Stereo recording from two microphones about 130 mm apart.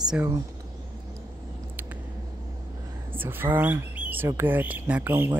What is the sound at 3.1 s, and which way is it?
Speech, 15° right (ahead or behind).